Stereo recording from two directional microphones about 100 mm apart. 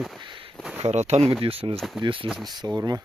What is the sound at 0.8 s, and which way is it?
Speech, 90° right.